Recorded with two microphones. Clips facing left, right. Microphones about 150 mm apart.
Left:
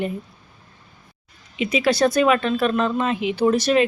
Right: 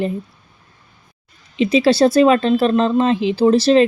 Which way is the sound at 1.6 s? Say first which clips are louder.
Right 6 dB; 30° right (ahead or behind).